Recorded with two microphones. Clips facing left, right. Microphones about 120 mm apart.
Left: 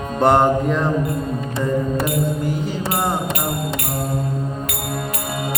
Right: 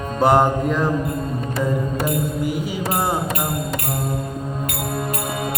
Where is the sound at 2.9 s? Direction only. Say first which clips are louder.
Even; 90° left.